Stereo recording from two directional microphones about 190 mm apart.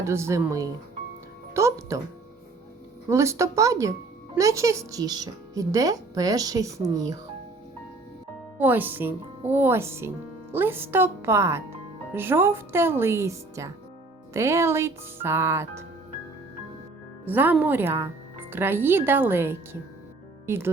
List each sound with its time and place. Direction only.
0.0 s a woman's voice: 15° right (ahead or behind)
3.1 s a woman's voice: 15° right (ahead or behind)
8.5 s a woman's voice: 10° right (ahead or behind)
17.2 s a woman's voice: 10° right (ahead or behind)